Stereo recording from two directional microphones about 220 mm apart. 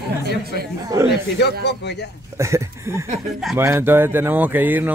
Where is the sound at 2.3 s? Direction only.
15° right (ahead or behind).